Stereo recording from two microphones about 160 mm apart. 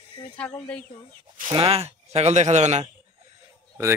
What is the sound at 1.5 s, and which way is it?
Speech, 35° right (ahead or behind).